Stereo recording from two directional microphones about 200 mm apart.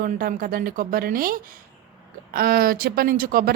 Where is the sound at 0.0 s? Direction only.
45° right (ahead or behind).